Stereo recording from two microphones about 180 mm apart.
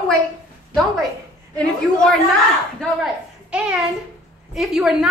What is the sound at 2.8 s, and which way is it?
A child's voice, 5° right (ahead or behind).